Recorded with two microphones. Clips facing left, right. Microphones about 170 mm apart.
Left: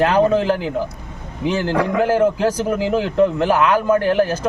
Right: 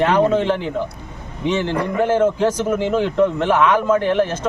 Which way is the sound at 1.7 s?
85° left.